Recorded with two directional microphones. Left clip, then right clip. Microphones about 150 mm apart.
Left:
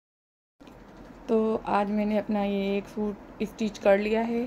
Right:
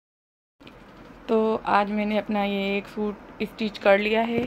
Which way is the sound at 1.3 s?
5° left (ahead or behind).